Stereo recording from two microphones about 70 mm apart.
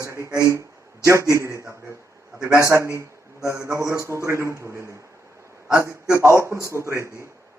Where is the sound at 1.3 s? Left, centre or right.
Right.